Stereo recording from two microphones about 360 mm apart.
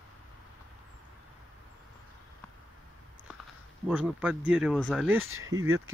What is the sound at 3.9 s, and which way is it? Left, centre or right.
Speech, centre.